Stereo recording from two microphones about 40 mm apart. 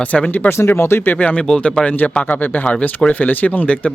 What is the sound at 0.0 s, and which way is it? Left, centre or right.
Speech, left.